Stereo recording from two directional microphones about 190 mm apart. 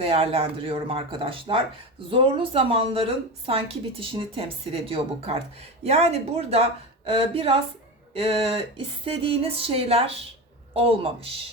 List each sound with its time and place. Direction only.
0.0 s a woman's voice: 30° right (ahead or behind)